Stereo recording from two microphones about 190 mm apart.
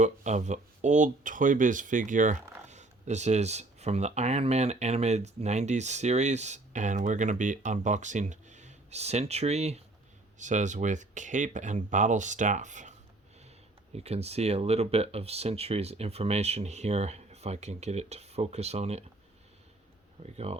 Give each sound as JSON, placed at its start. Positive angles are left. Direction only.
{"t": 0.0, "sound": "speech", "side_deg": -40}
{"t": 13.9, "sound": "speech", "side_deg": -35}
{"t": 20.2, "sound": "speech", "side_deg": -35}